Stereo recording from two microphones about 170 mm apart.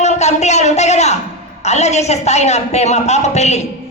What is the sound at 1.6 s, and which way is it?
A woman's voice, 40° left (ahead or behind).